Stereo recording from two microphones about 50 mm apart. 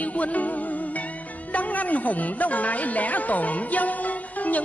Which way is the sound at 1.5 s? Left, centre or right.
Left.